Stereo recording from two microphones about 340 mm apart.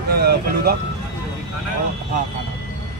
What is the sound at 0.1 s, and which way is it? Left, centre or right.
Speech, right.